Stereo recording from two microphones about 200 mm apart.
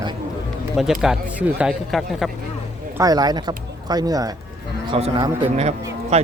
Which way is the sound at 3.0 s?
20° right (ahead or behind).